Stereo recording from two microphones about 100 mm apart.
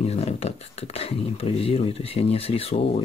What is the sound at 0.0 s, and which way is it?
Speech, 90° left.